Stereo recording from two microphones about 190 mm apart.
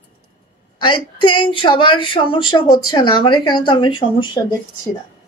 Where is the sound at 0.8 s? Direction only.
25° left (ahead or behind).